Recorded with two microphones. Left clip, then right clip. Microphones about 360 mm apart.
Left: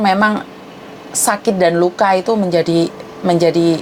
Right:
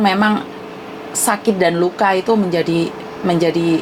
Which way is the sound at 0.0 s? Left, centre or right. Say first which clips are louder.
Left 2 dB; left.